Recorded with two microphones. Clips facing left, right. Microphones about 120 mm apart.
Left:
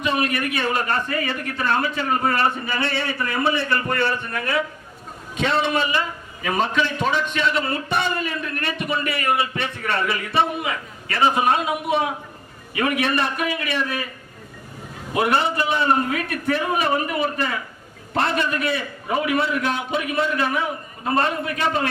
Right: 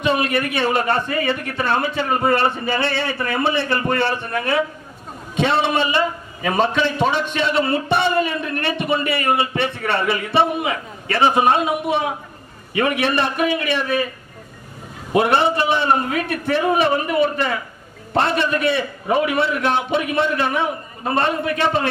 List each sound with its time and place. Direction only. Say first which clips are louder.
0.0 s a man's voice: right 3 dB; 25° right (ahead or behind)
15.1 s a man's voice: right 4 dB; 25° right (ahead or behind)